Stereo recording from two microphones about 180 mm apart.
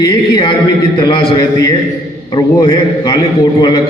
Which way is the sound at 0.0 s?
30° left (ahead or behind).